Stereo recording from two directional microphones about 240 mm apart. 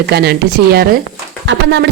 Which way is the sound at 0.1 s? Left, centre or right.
Right.